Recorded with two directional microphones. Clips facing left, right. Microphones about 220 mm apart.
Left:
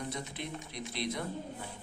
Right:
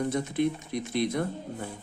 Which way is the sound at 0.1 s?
50° right (ahead or behind).